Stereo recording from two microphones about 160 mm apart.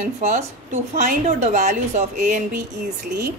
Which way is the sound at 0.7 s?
45° right (ahead or behind).